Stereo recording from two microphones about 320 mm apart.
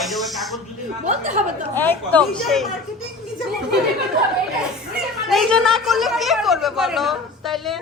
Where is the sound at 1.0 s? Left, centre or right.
Right.